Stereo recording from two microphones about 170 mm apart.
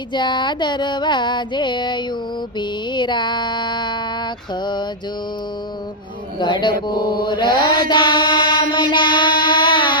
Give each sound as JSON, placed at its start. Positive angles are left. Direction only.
{"t": 0.1, "sound": "music", "side_deg": 25}
{"t": 6.4, "sound": "music", "side_deg": 25}
{"t": 8.7, "sound": "mantra", "side_deg": 25}